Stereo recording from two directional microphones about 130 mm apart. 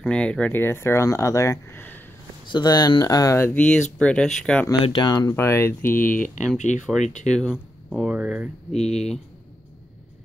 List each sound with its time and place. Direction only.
0.0 s speech: 10° left (ahead or behind)
2.4 s speech: 35° left (ahead or behind); by 4.6 s 5° left (ahead or behind)
4.8 s speech: 35° left (ahead or behind)
5.3 s speech: 20° left (ahead or behind)
6.0 s speech: 90° left
7.2 s speech: 5° left (ahead or behind)
7.5 s speech: 5° right (ahead or behind)
8.7 s speech: 55° left (ahead or behind)